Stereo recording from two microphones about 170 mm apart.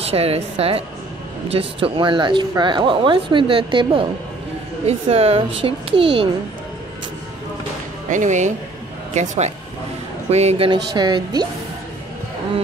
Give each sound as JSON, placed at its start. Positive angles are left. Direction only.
{"t": 0.1, "sound": "speech", "side_deg": -35}
{"t": 8.1, "sound": "speech", "side_deg": -45}
{"t": 11.0, "sound": "speech", "side_deg": -25}